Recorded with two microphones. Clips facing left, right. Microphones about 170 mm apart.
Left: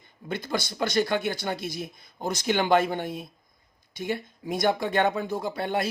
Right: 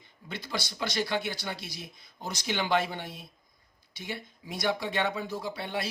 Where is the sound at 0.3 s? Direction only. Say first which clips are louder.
Left 6 dB; 50° left (ahead or behind).